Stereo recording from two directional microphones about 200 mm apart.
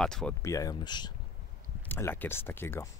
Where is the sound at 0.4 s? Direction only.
15° left (ahead or behind).